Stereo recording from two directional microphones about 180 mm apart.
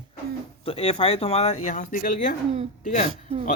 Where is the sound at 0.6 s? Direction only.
35° left (ahead or behind).